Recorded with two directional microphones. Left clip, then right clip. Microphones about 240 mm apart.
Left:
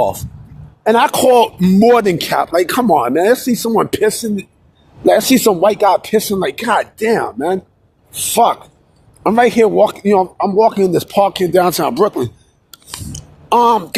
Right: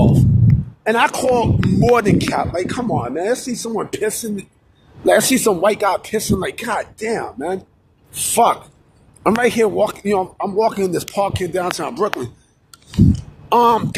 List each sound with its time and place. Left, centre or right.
0.9 s speech: left